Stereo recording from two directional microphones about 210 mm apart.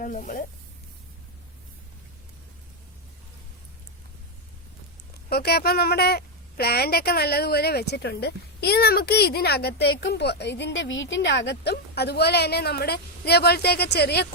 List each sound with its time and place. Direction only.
0.0 s speech: 40° left (ahead or behind)
5.3 s a woman's voice: 50° left (ahead or behind)